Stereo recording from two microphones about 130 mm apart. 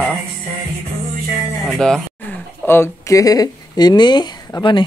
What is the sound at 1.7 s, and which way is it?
Music, 5° left (ahead or behind).